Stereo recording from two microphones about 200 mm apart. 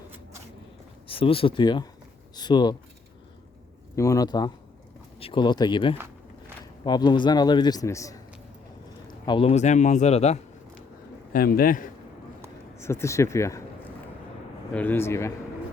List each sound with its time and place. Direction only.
1.0 s a man's voice: 25° left (ahead or behind)
3.9 s a man's voice: 15° left (ahead or behind); by 10.4 s 35° left (ahead or behind)
11.3 s a man's voice: 45° left (ahead or behind)
12.7 s speech: 15° left (ahead or behind)
14.7 s speech: 10° left (ahead or behind)